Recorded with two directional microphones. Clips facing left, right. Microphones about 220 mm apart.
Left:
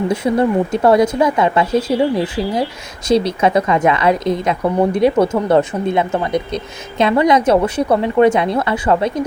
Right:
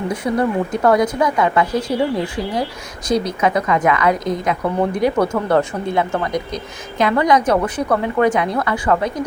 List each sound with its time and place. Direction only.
0.1 s speech: 25° left (ahead or behind)